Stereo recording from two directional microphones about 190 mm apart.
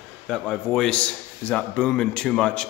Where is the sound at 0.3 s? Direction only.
5° left (ahead or behind).